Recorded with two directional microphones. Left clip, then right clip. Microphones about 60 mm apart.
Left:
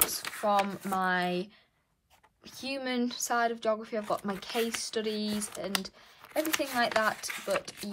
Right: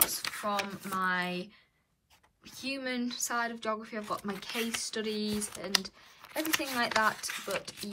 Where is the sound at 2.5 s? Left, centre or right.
Left.